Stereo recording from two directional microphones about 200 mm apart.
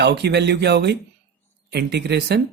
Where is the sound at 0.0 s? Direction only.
55° right (ahead or behind).